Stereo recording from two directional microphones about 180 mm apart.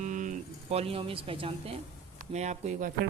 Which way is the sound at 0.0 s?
45° right (ahead or behind).